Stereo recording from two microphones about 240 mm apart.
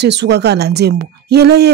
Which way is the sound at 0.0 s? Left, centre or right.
Right.